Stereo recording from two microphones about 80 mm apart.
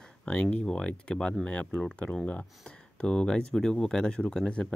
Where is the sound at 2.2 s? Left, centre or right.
Centre.